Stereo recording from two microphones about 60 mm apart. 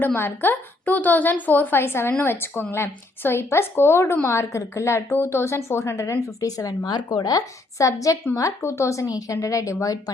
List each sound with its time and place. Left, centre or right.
0.0 s a woman's voice: left
5.1 s speech: left
7.3 s speech: left
8.6 s a woman's voice: left